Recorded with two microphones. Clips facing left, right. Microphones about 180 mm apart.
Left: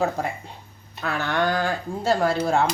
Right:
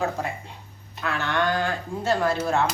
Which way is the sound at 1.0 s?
35° left (ahead or behind).